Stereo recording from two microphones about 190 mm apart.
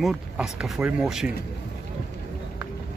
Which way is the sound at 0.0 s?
5° right (ahead or behind).